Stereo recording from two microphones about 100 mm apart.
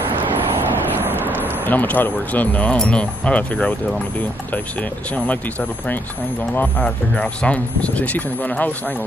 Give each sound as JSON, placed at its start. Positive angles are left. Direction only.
{"t": 1.0, "sound": "vehicle", "side_deg": -20}
{"t": 1.7, "sound": "speech", "side_deg": 20}
{"t": 5.1, "sound": "speech", "side_deg": 15}
{"t": 6.8, "sound": "speech", "side_deg": 10}